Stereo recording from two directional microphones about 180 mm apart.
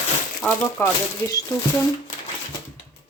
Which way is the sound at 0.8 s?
10° left (ahead or behind).